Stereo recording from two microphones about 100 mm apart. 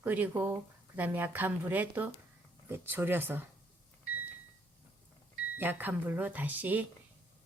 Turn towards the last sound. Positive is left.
turn(degrees=-15)  # may be behind; listen again after turning